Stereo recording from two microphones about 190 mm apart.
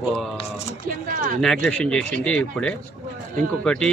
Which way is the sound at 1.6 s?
5° left (ahead or behind).